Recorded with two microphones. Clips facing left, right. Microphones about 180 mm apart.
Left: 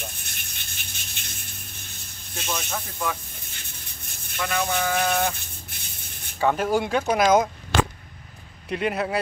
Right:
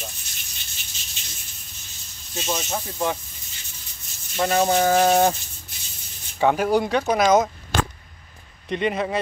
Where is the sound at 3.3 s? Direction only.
55° left (ahead or behind).